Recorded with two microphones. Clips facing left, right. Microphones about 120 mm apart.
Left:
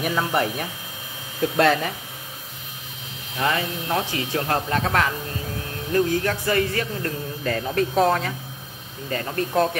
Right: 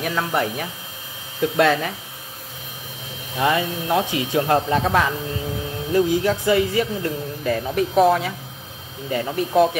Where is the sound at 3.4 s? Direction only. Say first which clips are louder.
Right 4 dB; 20° right (ahead or behind).